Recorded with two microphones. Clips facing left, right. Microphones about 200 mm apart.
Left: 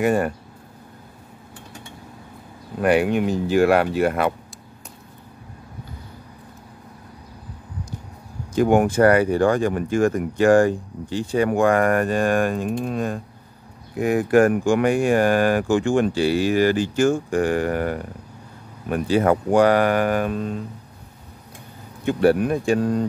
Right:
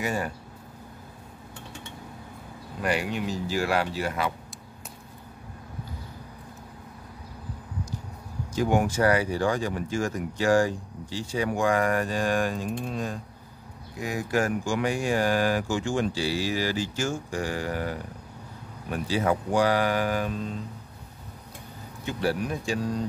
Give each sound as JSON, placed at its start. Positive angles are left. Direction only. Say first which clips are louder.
{"t": 0.0, "sound": "speech", "louder": "left 10 dB", "side_deg": 55}
{"t": 2.8, "sound": "speech", "louder": "left 10 dB", "side_deg": 55}
{"t": 8.5, "sound": "speech", "louder": "left 7 dB", "side_deg": 55}
{"t": 22.0, "sound": "speech", "louder": "left 10 dB", "side_deg": 55}